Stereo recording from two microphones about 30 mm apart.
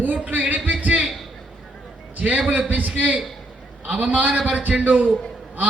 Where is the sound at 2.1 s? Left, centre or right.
Right.